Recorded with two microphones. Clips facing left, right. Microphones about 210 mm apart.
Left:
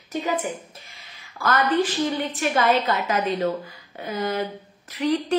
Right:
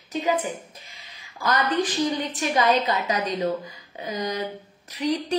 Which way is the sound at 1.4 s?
15° right (ahead or behind).